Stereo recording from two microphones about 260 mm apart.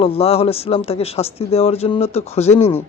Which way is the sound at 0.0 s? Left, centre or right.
Left.